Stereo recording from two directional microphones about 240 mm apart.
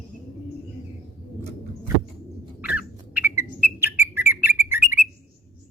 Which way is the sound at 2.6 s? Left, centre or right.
Centre.